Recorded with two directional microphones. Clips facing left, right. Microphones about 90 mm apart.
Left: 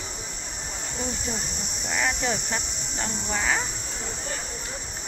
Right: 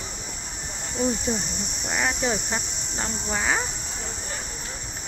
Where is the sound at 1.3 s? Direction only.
15° right (ahead or behind).